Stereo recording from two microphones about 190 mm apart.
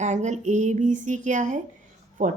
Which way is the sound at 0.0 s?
40° right (ahead or behind).